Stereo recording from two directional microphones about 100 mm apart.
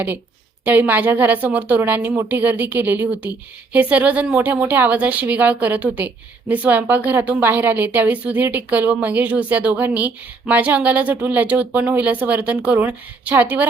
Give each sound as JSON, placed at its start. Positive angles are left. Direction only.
{"t": 0.6, "sound": "a woman's voice", "side_deg": -15}